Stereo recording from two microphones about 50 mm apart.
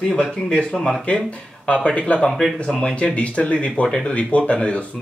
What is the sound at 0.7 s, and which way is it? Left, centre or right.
Speech, centre.